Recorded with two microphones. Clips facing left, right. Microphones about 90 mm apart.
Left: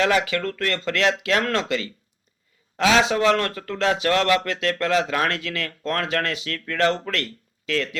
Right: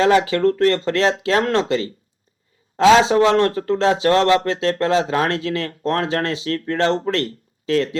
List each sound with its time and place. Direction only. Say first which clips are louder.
0.0 s speech: right 6 dB; 30° right (ahead or behind)